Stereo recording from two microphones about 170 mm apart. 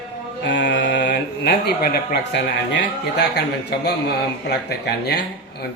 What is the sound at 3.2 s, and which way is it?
A man's voice, 75° left (ahead or behind).